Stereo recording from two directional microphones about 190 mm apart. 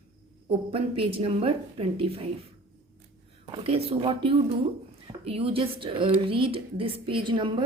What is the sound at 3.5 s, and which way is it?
A woman's voice, 30° right (ahead or behind).